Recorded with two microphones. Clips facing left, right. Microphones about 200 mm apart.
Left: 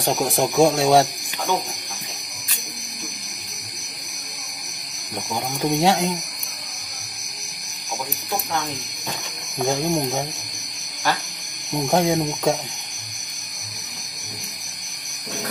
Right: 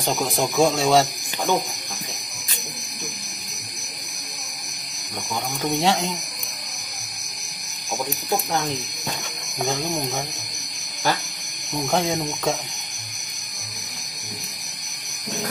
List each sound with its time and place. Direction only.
0.0 s speech: 15° left (ahead or behind)
5.3 s speech: 15° left (ahead or behind)
9.7 s speech: 15° left (ahead or behind)
11.7 s speech: 10° left (ahead or behind)